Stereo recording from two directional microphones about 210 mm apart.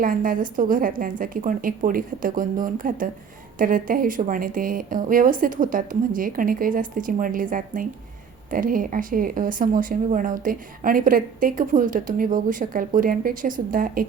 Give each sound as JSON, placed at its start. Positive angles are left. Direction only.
{"t": 0.0, "sound": "speech", "side_deg": -40}